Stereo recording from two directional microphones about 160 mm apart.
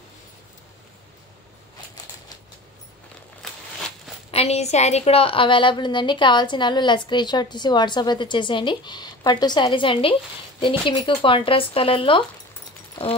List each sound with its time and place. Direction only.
4.3 s a woman's voice: 40° left (ahead or behind)